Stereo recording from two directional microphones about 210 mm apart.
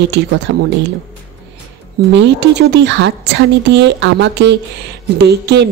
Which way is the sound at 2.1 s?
55° right (ahead or behind).